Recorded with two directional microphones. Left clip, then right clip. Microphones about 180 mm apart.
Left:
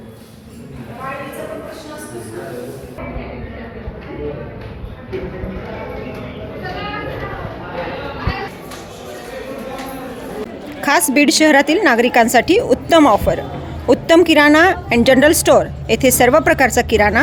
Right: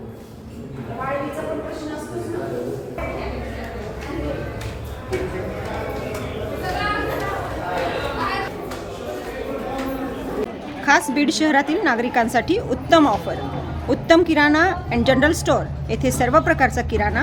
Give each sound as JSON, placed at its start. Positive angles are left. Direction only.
{"t": 10.8, "sound": "a woman's voice", "side_deg": 45}